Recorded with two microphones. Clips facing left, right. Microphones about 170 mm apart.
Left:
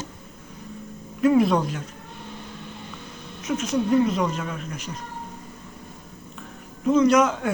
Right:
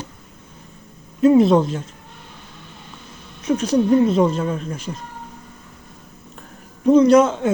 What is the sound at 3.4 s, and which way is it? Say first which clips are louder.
Speech: right 6 dB; 35° right (ahead or behind).